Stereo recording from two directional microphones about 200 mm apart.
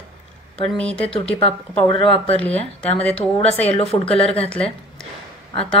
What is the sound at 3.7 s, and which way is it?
Speech, 30° left (ahead or behind).